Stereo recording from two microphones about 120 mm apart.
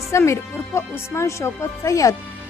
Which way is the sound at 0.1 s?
25° left (ahead or behind).